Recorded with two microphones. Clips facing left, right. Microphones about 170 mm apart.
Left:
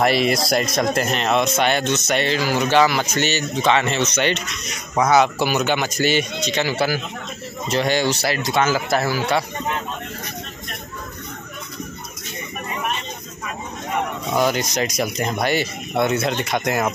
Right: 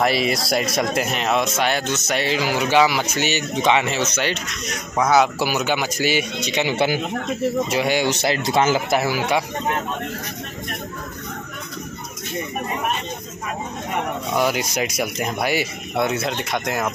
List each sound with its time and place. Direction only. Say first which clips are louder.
0.0 s a man's voice: left 2 dB; centre (ahead or behind); by 7.0 s 20° right (ahead or behind)
7.7 s speech: even; 10° right (ahead or behind); by 8.8 s 25° right (ahead or behind)
8.9 s a man's voice: even; 15° right (ahead or behind)
14.3 s speech: left 1 dB; 5° right (ahead or behind)